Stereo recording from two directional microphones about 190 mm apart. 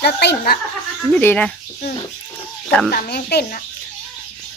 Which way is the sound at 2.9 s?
55° left (ahead or behind).